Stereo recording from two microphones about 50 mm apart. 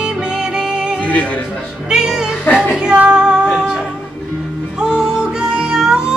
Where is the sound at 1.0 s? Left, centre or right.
Left.